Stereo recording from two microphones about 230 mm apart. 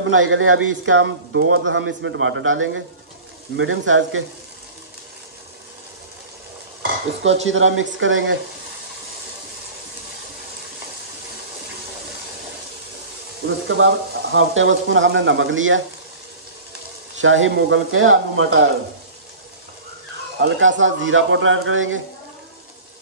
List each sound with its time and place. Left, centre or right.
0.0 s speech: right
6.8 s speech: right
13.8 s speech: right
17.2 s speech: right
20.4 s speech: right